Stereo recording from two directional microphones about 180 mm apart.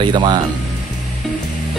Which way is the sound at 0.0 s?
25° right (ahead or behind).